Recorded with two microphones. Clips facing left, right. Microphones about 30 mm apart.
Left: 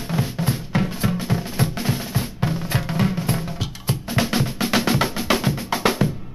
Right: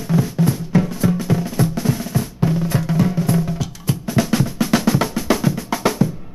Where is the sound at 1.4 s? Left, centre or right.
Left.